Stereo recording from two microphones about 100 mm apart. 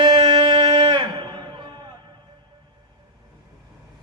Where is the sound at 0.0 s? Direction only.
50° right (ahead or behind).